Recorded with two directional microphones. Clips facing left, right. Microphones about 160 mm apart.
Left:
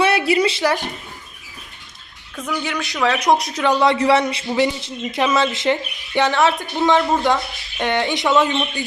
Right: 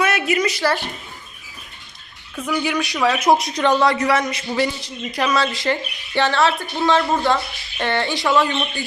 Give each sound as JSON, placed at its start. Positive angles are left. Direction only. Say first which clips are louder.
{"t": 0.0, "sound": "a sound", "louder": "left 3 dB", "side_deg": 30}
{"t": 0.6, "sound": "speech", "louder": "left 1 dB", "side_deg": 15}
{"t": 2.3, "sound": "a woman's voice", "louder": "right 3 dB", "side_deg": -10}
{"t": 3.8, "sound": "speech", "louder": "left 3 dB", "side_deg": 30}